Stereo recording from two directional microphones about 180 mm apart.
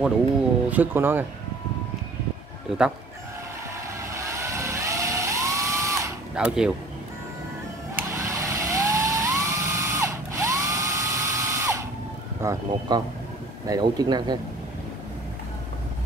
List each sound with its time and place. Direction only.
0.7 s speech: 10° right (ahead or behind)
4.1 s vehicle: 15° right (ahead or behind)
6.3 s speech: 5° right (ahead or behind)
7.9 s vehicle: 15° right (ahead or behind)
12.4 s speech: 20° right (ahead or behind)